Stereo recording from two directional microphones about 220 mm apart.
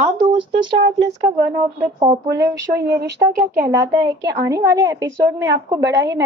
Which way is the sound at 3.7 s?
15° right (ahead or behind).